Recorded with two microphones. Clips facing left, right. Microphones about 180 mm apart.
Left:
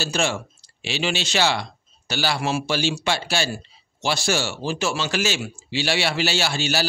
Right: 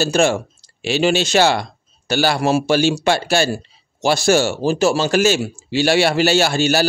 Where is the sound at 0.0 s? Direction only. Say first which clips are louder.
Right 8 dB; 45° right (ahead or behind).